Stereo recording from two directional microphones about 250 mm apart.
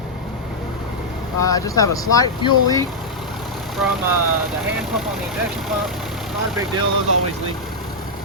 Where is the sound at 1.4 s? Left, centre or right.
Centre.